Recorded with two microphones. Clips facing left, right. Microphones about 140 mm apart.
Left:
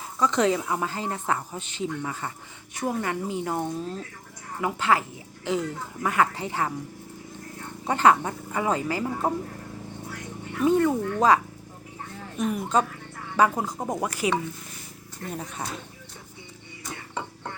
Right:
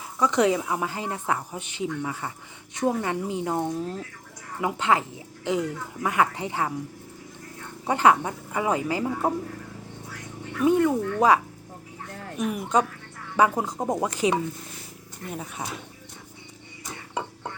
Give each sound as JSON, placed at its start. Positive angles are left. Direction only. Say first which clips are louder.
{"t": 0.2, "sound": "a woman's voice", "louder": "right 1 dB", "side_deg": -15}
{"t": 7.9, "sound": "speech", "louder": "even", "side_deg": -15}
{"t": 10.6, "sound": "speech", "louder": "right 1 dB", "side_deg": -10}
{"t": 12.4, "sound": "speech", "louder": "even", "side_deg": -15}
{"t": 15.3, "sound": "speech", "louder": "even", "side_deg": -5}